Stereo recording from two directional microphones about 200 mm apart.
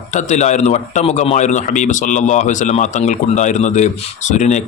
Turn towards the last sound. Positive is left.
turn(degrees=35)  # may be behind; listen again after turning